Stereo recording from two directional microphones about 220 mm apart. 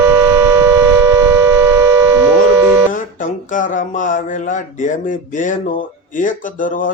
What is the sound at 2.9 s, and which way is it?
Music, 35° left (ahead or behind).